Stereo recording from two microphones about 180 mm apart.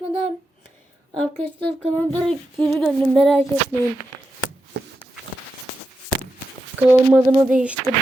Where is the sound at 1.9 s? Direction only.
10° left (ahead or behind).